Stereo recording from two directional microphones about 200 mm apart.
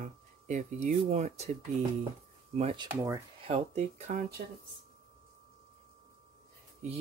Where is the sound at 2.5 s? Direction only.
30° right (ahead or behind).